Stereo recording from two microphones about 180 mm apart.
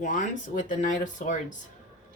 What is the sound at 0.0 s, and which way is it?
Speech, 45° left (ahead or behind).